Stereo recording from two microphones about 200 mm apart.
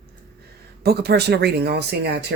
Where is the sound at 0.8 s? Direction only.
50° right (ahead or behind).